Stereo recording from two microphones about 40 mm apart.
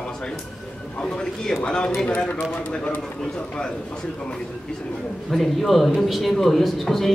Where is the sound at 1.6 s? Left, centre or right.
Left.